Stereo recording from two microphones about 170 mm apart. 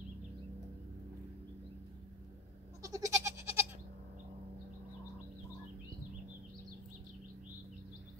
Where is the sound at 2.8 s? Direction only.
20° right (ahead or behind).